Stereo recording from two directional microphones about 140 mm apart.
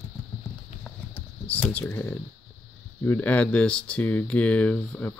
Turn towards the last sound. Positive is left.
turn(degrees=10)  # may be behind; listen again after turning